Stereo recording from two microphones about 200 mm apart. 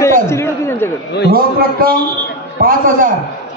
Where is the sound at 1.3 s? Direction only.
50° right (ahead or behind).